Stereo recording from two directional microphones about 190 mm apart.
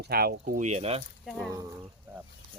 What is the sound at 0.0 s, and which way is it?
Speech, 55° right (ahead or behind).